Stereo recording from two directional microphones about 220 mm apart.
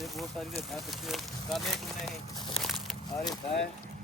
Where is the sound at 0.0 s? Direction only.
Centre (ahead or behind).